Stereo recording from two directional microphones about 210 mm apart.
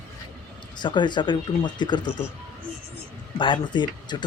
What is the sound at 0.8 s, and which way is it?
Speech, 20° left (ahead or behind).